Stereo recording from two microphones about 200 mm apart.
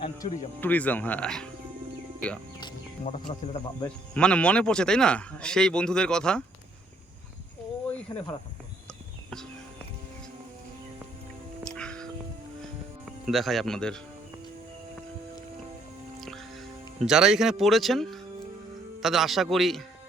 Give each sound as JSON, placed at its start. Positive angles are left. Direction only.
{"t": 0.2, "sound": "speech", "side_deg": 30}
{"t": 0.6, "sound": "speech", "side_deg": 10}
{"t": 3.0, "sound": "speech", "side_deg": 35}
{"t": 3.8, "sound": "speech", "side_deg": 5}
{"t": 8.1, "sound": "speech", "side_deg": 20}
{"t": 11.6, "sound": "music", "side_deg": 5}
{"t": 13.2, "sound": "speech", "side_deg": 0}
{"t": 16.2, "sound": "music", "side_deg": 0}
{"t": 18.9, "sound": "speech", "side_deg": 0}